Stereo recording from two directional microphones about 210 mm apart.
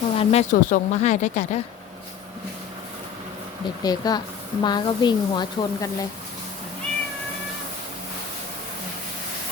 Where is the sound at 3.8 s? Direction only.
20° left (ahead or behind).